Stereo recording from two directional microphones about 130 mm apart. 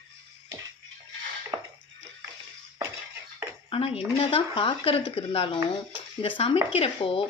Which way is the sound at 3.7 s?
50° left (ahead or behind).